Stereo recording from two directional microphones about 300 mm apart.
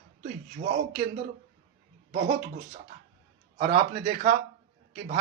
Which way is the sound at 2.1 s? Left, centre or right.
Right.